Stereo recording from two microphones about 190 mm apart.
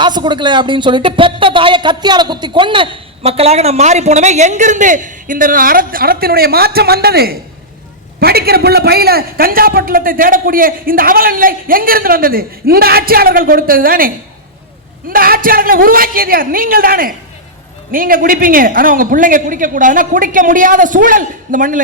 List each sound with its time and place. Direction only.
0.0 s a man's voice: 25° right (ahead or behind); by 14.1 s 50° right (ahead or behind)
15.1 s a man's voice: 50° right (ahead or behind)